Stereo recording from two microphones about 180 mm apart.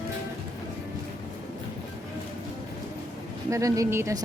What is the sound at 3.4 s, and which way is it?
Speech, 20° right (ahead or behind).